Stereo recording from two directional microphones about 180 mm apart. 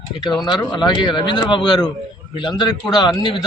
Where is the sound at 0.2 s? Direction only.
20° left (ahead or behind).